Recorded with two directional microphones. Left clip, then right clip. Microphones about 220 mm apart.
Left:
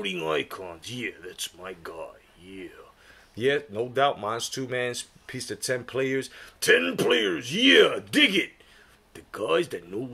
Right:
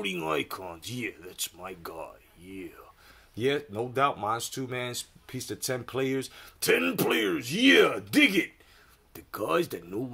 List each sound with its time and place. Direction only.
0.0 s speech: 25° right (ahead or behind)
3.3 s speech: 25° right (ahead or behind)